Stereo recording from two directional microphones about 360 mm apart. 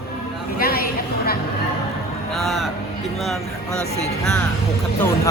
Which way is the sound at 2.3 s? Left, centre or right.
Centre.